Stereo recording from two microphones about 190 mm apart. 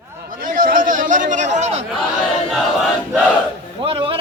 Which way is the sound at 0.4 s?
45° right (ahead or behind).